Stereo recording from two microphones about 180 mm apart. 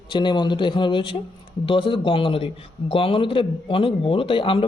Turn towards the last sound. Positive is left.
turn(degrees=30)  # may be behind; listen again after turning